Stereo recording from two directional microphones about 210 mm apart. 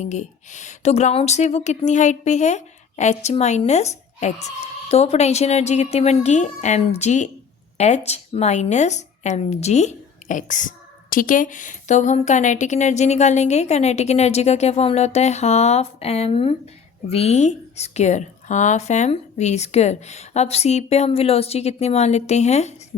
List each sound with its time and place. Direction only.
0.0 s a woman's voice: 35° left (ahead or behind)